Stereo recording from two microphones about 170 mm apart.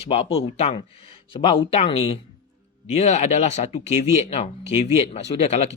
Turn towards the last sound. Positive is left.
turn(degrees=40)  # may be behind; listen again after turning